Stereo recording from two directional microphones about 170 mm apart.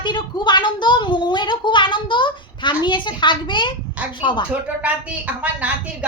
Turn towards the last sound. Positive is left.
turn(degrees=-10)  # may be behind; listen again after turning